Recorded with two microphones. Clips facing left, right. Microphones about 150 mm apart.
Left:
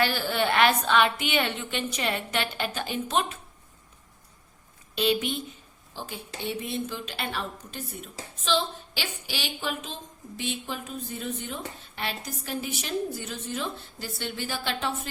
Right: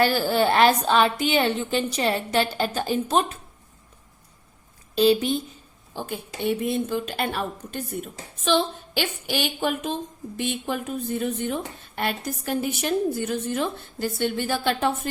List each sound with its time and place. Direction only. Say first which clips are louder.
0.0 s a woman's voice: right 6 dB; 40° right (ahead or behind)
4.9 s a woman's voice: right 7 dB; 35° right (ahead or behind)
5.9 s a woman's voice: right 6 dB; 55° right (ahead or behind)